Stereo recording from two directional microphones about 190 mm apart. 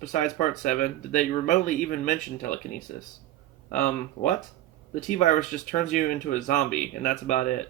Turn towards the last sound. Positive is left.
turn(degrees=45)  # may be behind; listen again after turning